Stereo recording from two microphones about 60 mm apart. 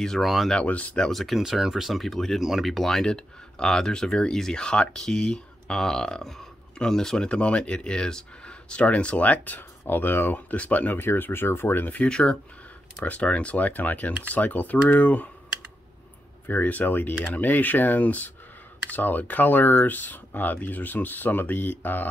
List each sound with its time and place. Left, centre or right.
0.0 s speech: centre
0.7 s speech: left
0.9 s speech: centre
1.2 s speech: centre; by 11.0 s left
11.0 s speech: left
12.1 s speech: centre
16.4 s speech: left